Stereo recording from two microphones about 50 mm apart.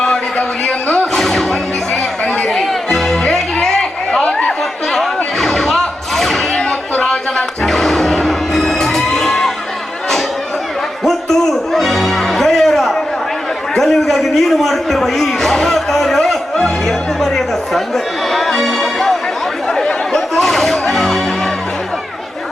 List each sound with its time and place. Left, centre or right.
0.0 s a sound: centre
1.1 s music: centre
1.9 s chatter: left
2.5 s music: centre; by 4.4 s left
4.4 s music: centre
6.5 s a sound: centre
6.9 s music: centre
7.6 s music: centre
11.0 s music: centre
13.7 s a sound: centre
19.6 s chatter: centre
20.3 s music: centre